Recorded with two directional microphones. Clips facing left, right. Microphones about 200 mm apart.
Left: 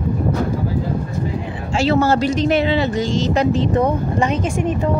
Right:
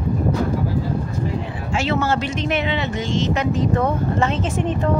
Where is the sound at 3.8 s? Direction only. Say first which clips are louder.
Left 2 dB; 15° left (ahead or behind).